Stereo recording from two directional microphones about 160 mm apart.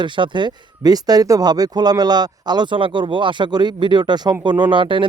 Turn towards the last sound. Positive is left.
turn(degrees=-30)  # may be behind; listen again after turning